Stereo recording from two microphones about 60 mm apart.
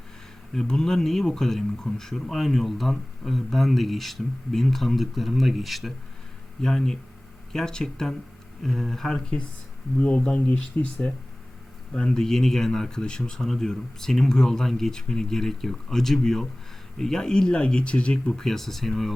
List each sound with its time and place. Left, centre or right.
0.5 s speech: centre
10.2 s speech: centre
18.3 s speech: centre